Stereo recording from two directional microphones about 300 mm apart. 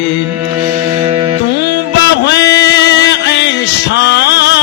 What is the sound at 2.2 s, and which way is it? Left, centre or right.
Music, left.